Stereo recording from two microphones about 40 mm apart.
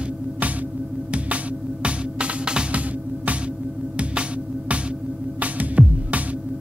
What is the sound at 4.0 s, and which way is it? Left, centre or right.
Music, right.